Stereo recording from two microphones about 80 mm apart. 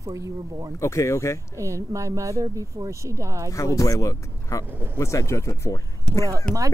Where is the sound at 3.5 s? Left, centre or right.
Left.